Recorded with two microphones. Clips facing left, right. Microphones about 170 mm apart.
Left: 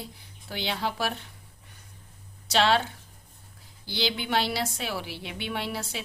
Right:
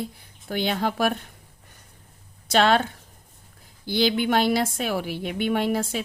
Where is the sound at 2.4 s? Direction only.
50° right (ahead or behind).